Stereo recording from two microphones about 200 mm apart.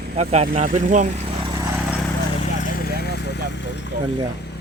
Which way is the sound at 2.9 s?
55° left (ahead or behind).